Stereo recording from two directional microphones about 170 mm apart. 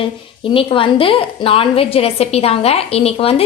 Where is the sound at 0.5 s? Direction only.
30° left (ahead or behind).